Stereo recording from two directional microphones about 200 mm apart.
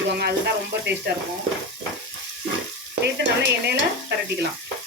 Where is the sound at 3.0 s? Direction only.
55° right (ahead or behind).